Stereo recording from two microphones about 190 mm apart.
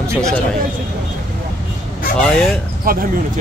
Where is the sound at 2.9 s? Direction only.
50° right (ahead or behind).